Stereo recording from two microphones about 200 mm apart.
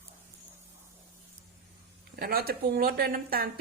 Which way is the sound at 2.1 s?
50° right (ahead or behind).